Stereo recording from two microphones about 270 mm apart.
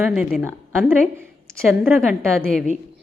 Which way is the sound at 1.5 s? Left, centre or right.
Centre.